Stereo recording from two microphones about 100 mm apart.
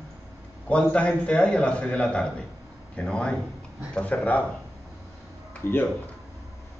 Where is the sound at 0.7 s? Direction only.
10° left (ahead or behind).